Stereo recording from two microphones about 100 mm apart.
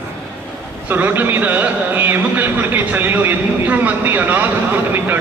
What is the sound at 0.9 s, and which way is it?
Speech, 20° right (ahead or behind).